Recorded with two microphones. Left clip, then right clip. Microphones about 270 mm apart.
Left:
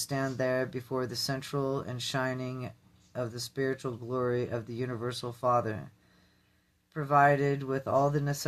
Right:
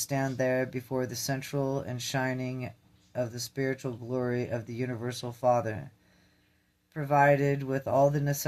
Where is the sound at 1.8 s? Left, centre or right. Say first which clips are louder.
Right 1 dB; right.